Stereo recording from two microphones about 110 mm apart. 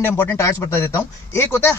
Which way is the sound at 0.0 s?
20° left (ahead or behind).